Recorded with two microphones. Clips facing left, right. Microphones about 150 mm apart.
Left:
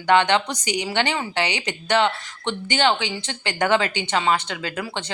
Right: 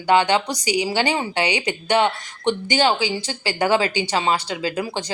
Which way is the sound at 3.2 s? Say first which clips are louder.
Right 2 dB; 35° right (ahead or behind).